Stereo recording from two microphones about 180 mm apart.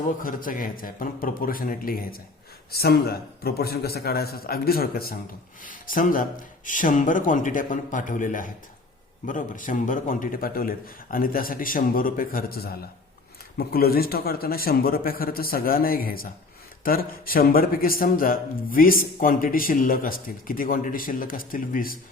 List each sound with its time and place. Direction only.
0.2 s a man's voice: 50° left (ahead or behind)